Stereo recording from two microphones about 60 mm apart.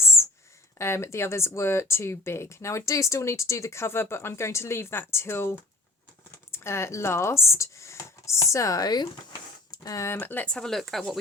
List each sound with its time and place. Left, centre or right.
0.8 s speech: left
7.4 s a sound: left
9.7 s speech: left
10.1 s speech: left
10.4 s speech: centre